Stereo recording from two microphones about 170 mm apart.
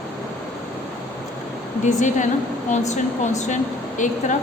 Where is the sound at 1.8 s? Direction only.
45° left (ahead or behind).